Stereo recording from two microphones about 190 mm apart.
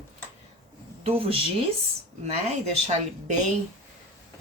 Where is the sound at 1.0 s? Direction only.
30° right (ahead or behind).